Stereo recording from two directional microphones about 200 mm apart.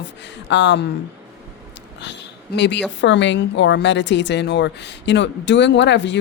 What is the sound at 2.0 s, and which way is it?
A woman's voice, 60° left (ahead or behind).